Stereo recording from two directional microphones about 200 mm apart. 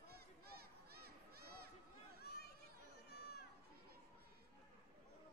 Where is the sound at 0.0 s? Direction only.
50° right (ahead or behind).